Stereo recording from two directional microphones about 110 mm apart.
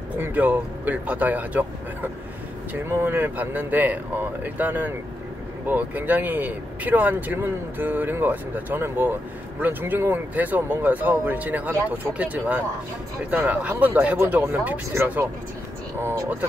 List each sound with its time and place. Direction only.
0.2 s speech: 15° right (ahead or behind)